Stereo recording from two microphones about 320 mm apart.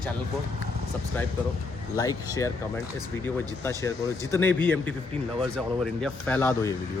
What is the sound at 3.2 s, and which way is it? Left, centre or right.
A man's voice, centre.